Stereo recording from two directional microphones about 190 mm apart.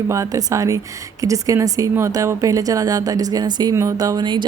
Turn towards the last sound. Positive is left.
turn(degrees=-25)  # may be behind; listen again after turning